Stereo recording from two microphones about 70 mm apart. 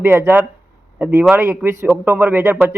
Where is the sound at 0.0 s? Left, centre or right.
Right.